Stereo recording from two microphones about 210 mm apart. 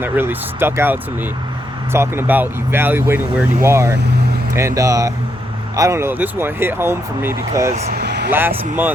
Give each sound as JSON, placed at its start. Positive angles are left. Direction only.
{"t": 0.0, "sound": "speech", "side_deg": -10}
{"t": 7.9, "sound": "speech", "side_deg": -50}
{"t": 8.3, "sound": "speech", "side_deg": -10}